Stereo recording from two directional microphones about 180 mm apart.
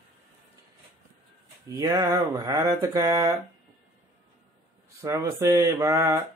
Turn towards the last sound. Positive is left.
turn(degrees=-15)  # may be behind; listen again after turning